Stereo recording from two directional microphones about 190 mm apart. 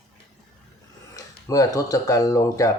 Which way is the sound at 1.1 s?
20° left (ahead or behind).